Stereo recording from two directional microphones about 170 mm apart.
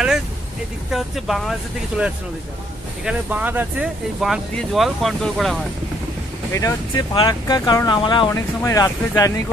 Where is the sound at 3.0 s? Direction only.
10° right (ahead or behind).